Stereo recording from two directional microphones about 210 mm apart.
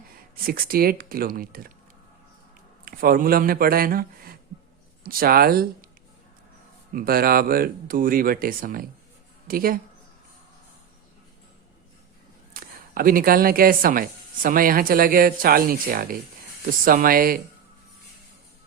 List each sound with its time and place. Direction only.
0.3 s speech: 45° right (ahead or behind)
2.8 s speech: 45° right (ahead or behind)
6.9 s speech: 45° right (ahead or behind)
12.5 s speech: 45° right (ahead or behind)